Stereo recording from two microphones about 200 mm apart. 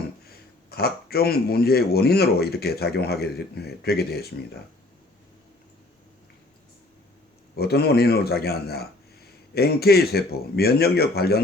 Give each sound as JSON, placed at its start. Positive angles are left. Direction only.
{"t": 0.7, "sound": "speech", "side_deg": 50}
{"t": 7.5, "sound": "speech", "side_deg": 50}